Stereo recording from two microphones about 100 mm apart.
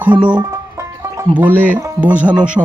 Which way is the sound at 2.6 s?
30° right (ahead or behind).